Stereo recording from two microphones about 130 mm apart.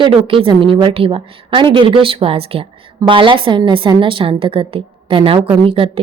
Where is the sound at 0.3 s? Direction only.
45° right (ahead or behind).